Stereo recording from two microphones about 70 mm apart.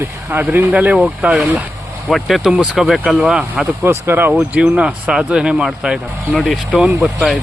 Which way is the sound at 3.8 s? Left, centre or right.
Right.